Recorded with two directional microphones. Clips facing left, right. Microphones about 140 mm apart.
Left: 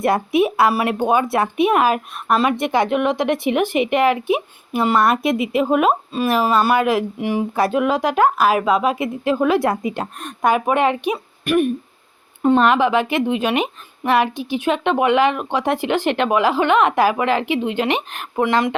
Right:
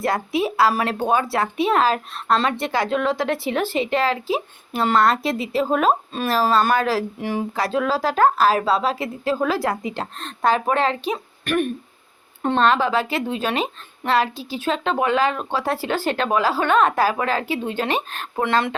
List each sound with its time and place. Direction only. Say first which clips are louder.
0.0 s a woman's voice: left 5 dB; 20° left (ahead or behind)